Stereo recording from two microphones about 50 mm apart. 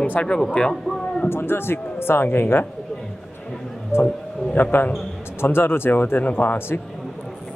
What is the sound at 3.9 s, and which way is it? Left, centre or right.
Speech, left.